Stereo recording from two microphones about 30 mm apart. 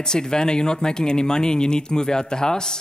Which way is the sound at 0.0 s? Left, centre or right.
Left.